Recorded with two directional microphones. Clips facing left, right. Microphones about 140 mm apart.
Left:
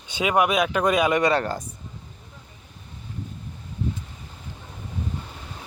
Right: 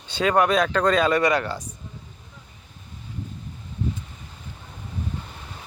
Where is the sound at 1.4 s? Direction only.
45° left (ahead or behind).